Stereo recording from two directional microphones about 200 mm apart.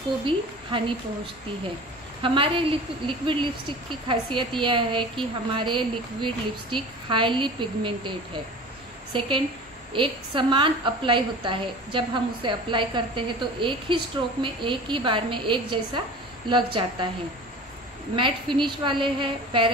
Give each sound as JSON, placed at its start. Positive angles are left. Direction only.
{"t": 0.2, "sound": "a woman's voice", "side_deg": -25}
{"t": 9.1, "sound": "a woman's voice", "side_deg": -25}
{"t": 18.1, "sound": "a woman's voice", "side_deg": -25}